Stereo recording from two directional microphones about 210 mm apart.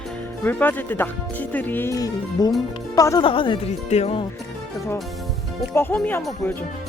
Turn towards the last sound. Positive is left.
turn(degrees=10)  # may be behind; listen again after turning